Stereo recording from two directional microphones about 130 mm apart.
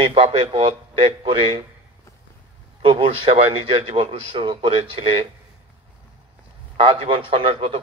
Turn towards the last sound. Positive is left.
turn(degrees=-45)  # may be behind; listen again after turning